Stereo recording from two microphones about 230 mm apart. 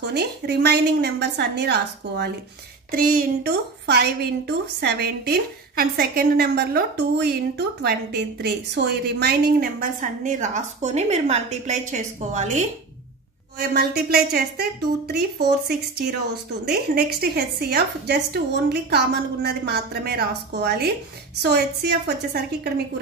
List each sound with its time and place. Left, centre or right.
0.0 s a woman's voice: right
13.6 s a woman's voice: right